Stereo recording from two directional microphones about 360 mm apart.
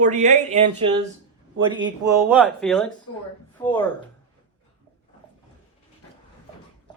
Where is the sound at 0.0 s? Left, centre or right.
Centre.